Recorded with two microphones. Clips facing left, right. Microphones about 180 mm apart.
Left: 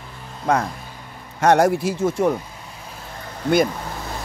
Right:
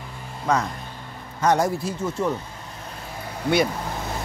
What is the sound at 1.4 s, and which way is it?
Speech, 70° left (ahead or behind).